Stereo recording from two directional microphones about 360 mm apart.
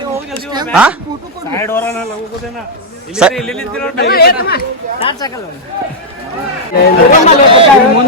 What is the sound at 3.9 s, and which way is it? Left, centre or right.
Speech, left.